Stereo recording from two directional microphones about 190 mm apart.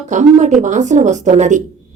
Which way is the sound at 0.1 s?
40° right (ahead or behind).